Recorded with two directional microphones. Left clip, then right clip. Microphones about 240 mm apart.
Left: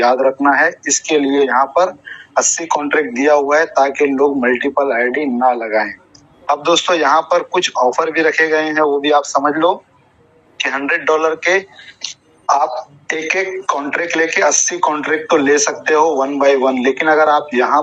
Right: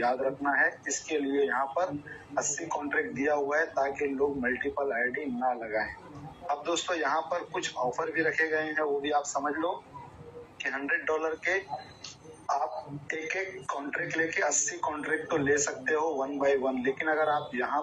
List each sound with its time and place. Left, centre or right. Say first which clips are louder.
0.0 s speech: left 16 dB; left